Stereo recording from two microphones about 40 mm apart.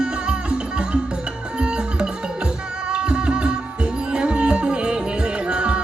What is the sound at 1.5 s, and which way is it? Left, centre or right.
Music, right.